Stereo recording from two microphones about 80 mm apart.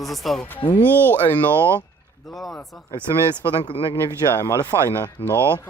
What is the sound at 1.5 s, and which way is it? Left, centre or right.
Speech, right.